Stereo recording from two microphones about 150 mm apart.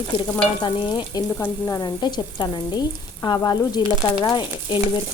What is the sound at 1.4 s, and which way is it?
Speech, 25° left (ahead or behind).